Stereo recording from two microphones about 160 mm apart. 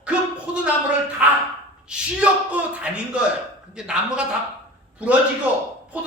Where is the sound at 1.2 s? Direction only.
10° right (ahead or behind).